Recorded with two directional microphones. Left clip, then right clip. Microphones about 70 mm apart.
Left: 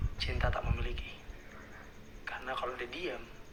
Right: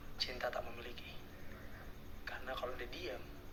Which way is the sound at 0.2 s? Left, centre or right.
Right.